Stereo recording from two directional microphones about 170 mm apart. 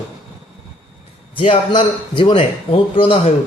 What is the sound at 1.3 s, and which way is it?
A man's voice, 30° left (ahead or behind).